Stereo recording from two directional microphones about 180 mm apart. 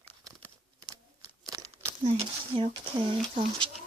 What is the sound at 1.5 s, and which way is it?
Crumpling, 20° right (ahead or behind).